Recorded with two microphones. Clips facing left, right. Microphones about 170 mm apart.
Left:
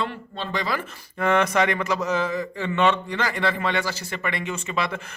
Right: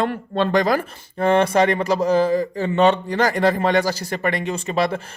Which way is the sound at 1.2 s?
30° right (ahead or behind).